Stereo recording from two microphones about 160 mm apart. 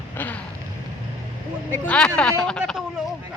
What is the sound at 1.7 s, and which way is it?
Speech, 10° left (ahead or behind).